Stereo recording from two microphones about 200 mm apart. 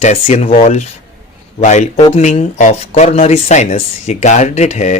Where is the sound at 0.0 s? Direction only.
35° left (ahead or behind).